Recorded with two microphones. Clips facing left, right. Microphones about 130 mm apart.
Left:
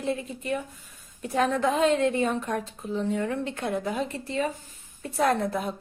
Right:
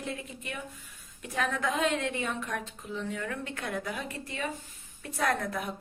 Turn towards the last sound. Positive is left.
turn(degrees=30)  # may be behind; listen again after turning